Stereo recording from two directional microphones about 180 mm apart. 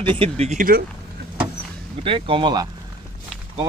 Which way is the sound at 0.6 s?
55° right (ahead or behind).